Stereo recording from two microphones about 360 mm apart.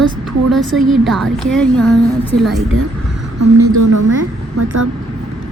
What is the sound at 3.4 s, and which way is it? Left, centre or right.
Speech, right.